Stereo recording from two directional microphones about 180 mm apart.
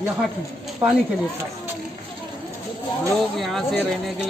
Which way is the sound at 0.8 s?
10° right (ahead or behind).